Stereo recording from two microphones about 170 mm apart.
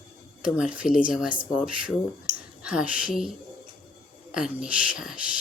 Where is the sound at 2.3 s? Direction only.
55° left (ahead or behind).